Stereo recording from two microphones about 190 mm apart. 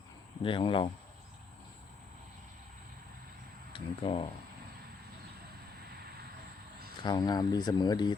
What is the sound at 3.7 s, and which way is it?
Speech, 30° left (ahead or behind).